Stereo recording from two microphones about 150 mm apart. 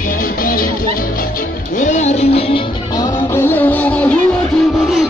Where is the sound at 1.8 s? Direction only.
50° left (ahead or behind).